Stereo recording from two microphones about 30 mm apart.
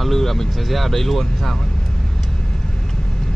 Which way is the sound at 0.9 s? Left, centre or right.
Centre.